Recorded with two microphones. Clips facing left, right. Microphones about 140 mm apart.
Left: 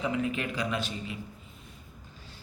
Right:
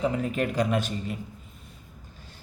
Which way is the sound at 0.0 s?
40° right (ahead or behind).